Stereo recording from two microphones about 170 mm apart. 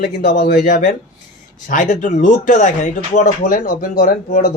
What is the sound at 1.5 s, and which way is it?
Speech, 45° left (ahead or behind).